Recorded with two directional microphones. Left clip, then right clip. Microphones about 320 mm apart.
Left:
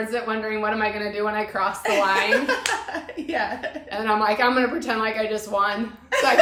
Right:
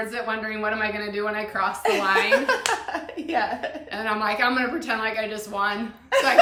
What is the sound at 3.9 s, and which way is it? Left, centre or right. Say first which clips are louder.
A woman's voice: left 4 dB; centre.